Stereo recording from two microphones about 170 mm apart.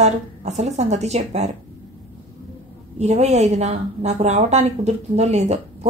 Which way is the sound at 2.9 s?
40° right (ahead or behind).